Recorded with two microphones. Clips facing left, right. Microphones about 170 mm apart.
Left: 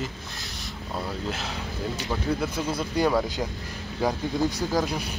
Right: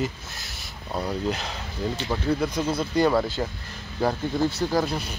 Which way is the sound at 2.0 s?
5° left (ahead or behind).